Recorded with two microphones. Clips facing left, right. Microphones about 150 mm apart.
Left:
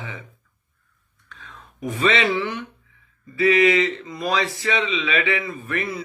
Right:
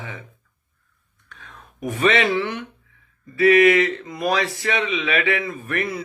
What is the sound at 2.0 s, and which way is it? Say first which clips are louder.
A man's voice: right 2 dB; 55° right (ahead or behind).